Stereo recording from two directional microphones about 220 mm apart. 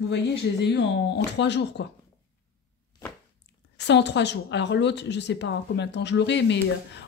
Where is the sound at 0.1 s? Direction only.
50° left (ahead or behind).